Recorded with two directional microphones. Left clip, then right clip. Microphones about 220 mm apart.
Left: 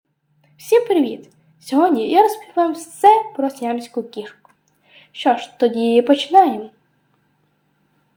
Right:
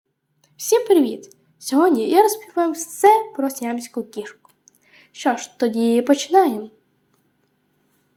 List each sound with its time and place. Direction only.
0.4 s a woman's voice: 20° right (ahead or behind)